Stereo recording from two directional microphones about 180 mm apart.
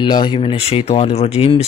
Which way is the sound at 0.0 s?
25° left (ahead or behind).